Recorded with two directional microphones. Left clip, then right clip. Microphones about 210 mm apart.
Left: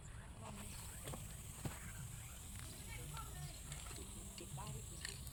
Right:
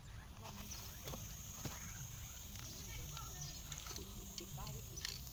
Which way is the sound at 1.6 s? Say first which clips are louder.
Even; 10° right (ahead or behind).